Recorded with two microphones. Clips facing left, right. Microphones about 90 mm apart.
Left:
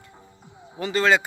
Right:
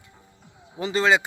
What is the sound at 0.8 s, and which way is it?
Speech, 25° right (ahead or behind).